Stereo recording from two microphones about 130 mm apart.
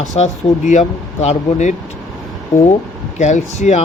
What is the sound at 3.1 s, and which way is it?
Speech, 65° left (ahead or behind).